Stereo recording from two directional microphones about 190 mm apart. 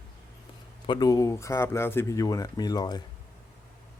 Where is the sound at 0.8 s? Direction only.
20° left (ahead or behind).